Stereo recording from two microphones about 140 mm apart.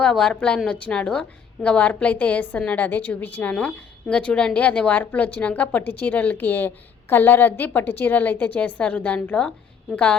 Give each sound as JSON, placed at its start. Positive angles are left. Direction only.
{"t": 0.0, "sound": "a woman's voice", "side_deg": 5}